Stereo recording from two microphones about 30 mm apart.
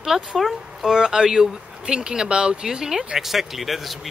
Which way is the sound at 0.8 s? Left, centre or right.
Right.